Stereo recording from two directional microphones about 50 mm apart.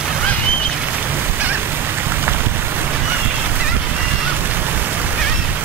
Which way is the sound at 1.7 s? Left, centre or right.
Right.